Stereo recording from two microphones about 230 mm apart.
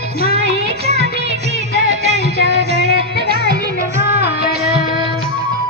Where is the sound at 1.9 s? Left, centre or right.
Right.